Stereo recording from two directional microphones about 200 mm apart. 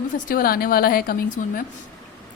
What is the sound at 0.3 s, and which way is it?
Speech, 45° left (ahead or behind).